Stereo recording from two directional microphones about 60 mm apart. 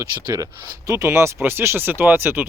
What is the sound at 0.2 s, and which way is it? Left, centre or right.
Speech, right.